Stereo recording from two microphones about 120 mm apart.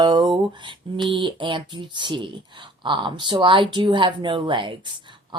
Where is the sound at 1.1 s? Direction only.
45° right (ahead or behind).